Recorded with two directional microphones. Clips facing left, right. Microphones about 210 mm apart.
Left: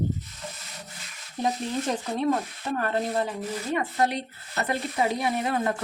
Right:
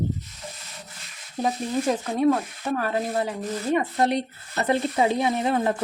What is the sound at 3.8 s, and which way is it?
Speech, 25° right (ahead or behind).